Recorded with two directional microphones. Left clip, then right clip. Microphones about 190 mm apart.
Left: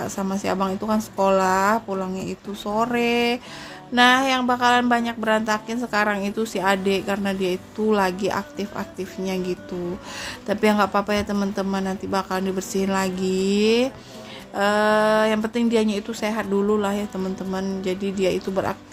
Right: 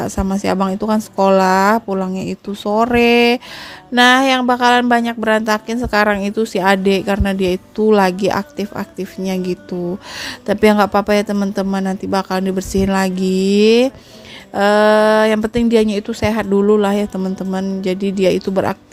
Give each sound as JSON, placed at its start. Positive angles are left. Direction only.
{"t": 0.0, "sound": "speech", "side_deg": -45}